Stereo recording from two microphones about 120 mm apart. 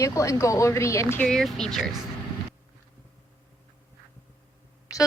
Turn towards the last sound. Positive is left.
turn(degrees=25)  # may be behind; listen again after turning